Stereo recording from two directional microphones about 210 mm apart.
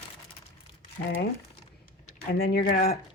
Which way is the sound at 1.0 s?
55° left (ahead or behind).